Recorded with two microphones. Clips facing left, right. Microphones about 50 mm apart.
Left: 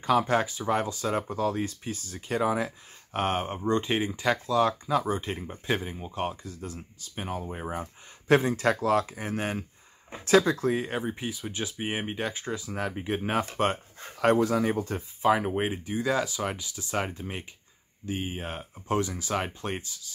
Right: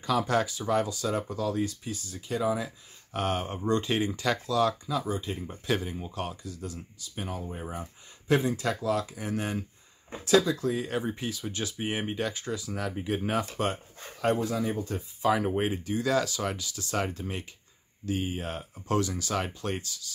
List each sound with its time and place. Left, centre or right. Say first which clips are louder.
0.0 s speech: left 2 dB; left
3.1 s speech: left 2 dB; left
4.8 s speech: left 4 dB; left
5.4 s speech: even; left
10.9 s speech: even; centre; by 13.7 s left
14.2 s speech: left 4 dB; left
15.2 s speech: left 1 dB; left